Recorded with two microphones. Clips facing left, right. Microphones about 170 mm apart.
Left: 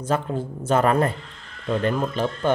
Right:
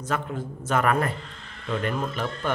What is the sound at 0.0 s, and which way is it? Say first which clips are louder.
Speech: left 5 dB; 30° left (ahead or behind).